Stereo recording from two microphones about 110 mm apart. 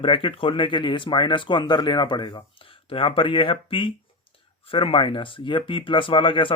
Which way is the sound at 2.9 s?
55° left (ahead or behind).